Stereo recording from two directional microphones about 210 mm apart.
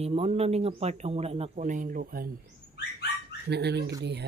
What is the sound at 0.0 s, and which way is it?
Speech, 30° right (ahead or behind).